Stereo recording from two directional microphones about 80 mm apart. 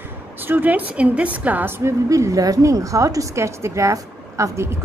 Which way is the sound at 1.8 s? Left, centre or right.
Right.